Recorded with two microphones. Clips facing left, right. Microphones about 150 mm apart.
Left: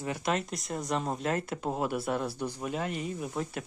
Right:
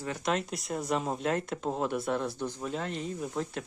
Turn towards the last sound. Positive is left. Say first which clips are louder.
# even
turn(degrees=5)  # may be behind; listen again after turning